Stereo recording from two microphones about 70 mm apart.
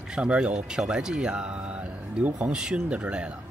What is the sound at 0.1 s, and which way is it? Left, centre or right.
Speech, centre.